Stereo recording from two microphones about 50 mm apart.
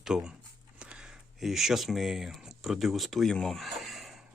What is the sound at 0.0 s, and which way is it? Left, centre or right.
Speech, centre.